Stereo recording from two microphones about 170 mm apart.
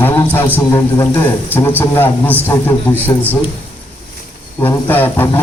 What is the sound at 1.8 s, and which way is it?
Speech, 10° left (ahead or behind).